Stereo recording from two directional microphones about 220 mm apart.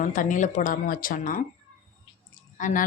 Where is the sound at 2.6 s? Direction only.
35° left (ahead or behind).